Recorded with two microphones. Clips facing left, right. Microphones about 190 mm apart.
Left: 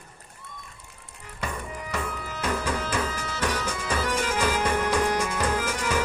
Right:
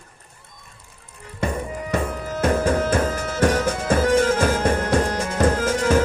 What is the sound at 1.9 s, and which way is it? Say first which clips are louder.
Music: right 8 dB; 50° right (ahead or behind).